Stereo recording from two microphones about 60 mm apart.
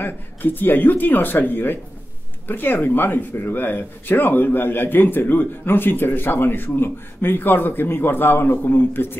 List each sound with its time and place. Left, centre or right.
0.0 s speech: left